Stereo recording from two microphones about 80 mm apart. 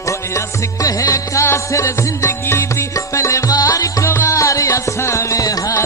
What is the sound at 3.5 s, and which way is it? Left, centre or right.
Music, left.